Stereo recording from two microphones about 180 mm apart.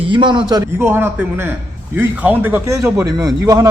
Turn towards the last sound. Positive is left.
turn(degrees=-15)  # may be behind; listen again after turning